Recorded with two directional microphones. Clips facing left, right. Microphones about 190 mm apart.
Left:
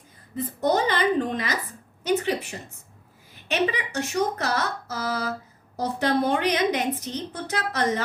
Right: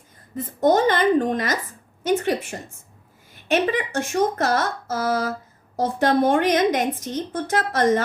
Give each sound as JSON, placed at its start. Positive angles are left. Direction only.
{"t": 0.3, "sound": "a woman's voice", "side_deg": -50}